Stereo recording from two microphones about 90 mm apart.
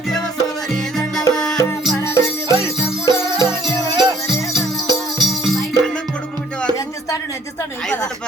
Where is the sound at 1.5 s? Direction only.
35° left (ahead or behind).